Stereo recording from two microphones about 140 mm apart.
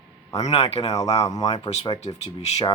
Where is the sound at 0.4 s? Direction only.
45° left (ahead or behind).